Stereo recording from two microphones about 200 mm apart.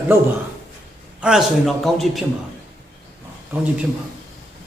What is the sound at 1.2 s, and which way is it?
A man's voice, 5° right (ahead or behind).